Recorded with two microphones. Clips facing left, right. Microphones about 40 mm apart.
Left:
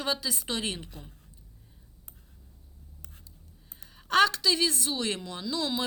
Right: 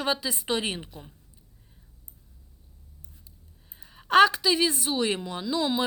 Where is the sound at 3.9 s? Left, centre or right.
Centre.